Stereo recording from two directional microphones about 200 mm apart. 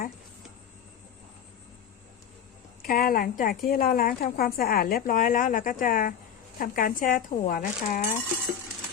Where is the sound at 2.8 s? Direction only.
45° left (ahead or behind).